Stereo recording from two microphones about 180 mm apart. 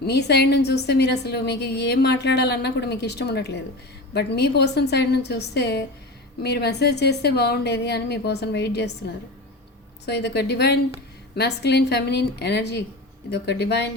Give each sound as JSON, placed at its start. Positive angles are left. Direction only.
{"t": 0.0, "sound": "a woman's voice", "side_deg": 65}
{"t": 10.1, "sound": "a woman's voice", "side_deg": 70}